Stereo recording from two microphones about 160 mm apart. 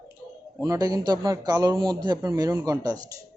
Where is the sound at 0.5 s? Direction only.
20° right (ahead or behind).